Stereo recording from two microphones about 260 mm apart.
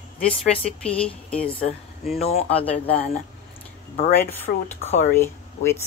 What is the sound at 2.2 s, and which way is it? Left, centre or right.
Speech, left.